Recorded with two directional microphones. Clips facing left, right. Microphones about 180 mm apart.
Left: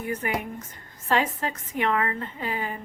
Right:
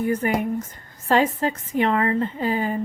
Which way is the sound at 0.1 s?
35° right (ahead or behind).